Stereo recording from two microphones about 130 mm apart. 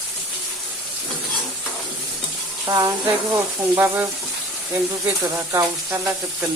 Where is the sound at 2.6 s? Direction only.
30° right (ahead or behind).